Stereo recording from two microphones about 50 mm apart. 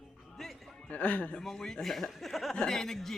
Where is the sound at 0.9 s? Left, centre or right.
Left.